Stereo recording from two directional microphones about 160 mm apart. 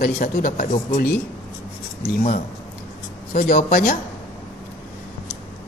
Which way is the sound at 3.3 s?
60° left (ahead or behind).